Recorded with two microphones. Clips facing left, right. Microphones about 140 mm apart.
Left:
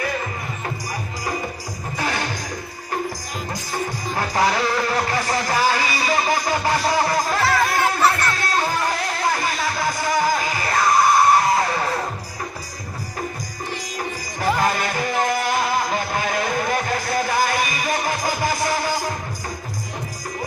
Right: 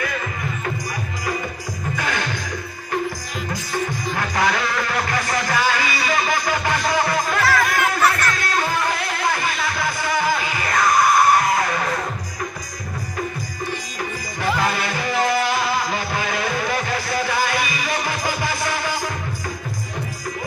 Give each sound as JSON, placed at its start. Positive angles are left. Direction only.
{"t": 2.0, "sound": "music", "side_deg": 35}
{"t": 3.7, "sound": "music", "side_deg": 35}
{"t": 14.4, "sound": "music", "side_deg": 40}